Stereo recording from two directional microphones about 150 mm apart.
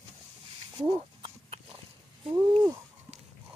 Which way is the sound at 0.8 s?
35° right (ahead or behind).